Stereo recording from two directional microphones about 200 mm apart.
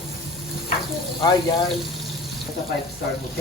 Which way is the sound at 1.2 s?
20° left (ahead or behind).